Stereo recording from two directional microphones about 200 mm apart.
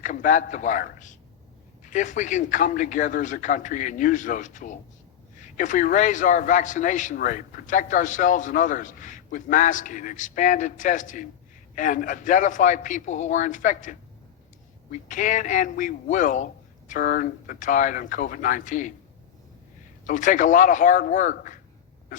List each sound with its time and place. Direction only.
0.0 s a man's voice: 40° left (ahead or behind)
15.0 s a man's voice: 40° left (ahead or behind)
20.1 s a man's voice: 40° left (ahead or behind)